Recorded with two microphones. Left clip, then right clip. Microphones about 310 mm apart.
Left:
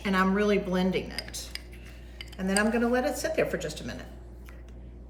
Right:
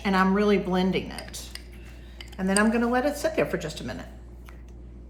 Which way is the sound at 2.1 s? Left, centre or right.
Centre.